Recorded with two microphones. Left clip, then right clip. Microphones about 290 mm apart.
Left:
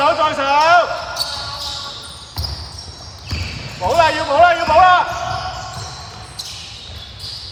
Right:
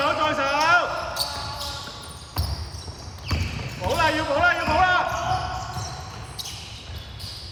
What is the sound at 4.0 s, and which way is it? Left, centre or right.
Speech, left.